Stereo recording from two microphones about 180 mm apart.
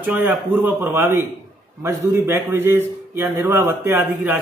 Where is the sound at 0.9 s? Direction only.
15° right (ahead or behind).